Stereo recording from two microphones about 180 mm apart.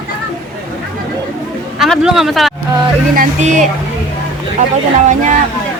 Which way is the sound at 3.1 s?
45° right (ahead or behind).